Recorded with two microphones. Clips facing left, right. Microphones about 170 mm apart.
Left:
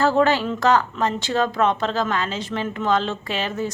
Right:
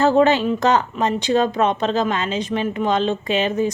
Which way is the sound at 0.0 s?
20° right (ahead or behind).